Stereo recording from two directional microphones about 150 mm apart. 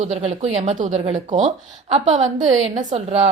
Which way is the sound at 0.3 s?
50° right (ahead or behind).